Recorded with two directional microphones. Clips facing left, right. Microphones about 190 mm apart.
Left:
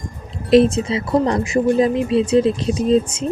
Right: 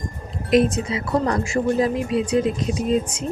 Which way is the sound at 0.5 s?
30° left (ahead or behind).